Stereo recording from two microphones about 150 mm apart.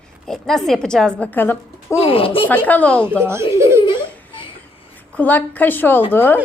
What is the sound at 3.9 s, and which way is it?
Crying, 35° left (ahead or behind).